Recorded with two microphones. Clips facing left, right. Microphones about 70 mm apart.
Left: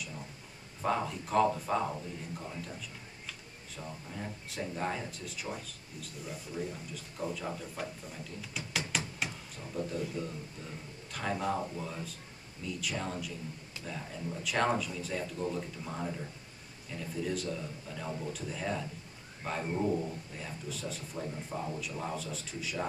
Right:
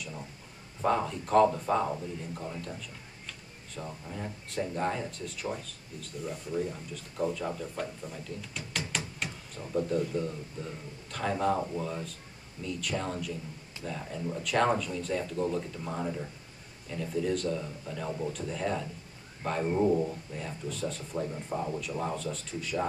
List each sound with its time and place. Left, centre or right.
0.8 s speech: centre
4.1 s speech: centre
19.7 s speech: centre
20.3 s speech: centre